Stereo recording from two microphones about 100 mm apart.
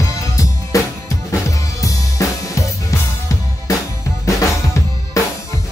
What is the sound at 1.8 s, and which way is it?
Drum kit, 35° left (ahead or behind).